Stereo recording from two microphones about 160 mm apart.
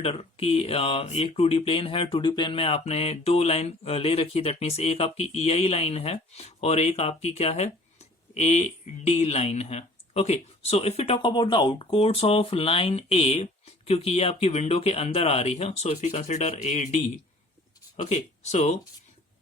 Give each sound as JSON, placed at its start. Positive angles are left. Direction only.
{"t": 0.0, "sound": "speech", "side_deg": 40}